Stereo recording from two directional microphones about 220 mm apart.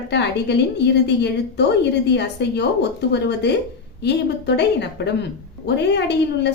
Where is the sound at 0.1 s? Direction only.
50° left (ahead or behind).